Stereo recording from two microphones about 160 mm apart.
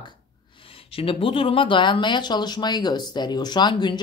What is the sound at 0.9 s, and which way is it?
Speech, 35° left (ahead or behind).